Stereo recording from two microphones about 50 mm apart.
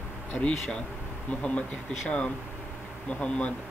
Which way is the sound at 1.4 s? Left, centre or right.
Centre.